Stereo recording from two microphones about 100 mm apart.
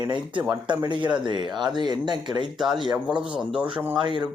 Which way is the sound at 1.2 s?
50° right (ahead or behind).